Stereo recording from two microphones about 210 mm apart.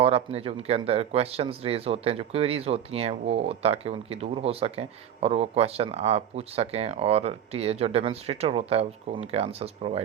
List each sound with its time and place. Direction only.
0.0 s speech: 30° right (ahead or behind)